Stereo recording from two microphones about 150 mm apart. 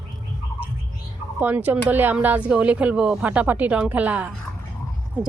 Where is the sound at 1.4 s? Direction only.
10° right (ahead or behind).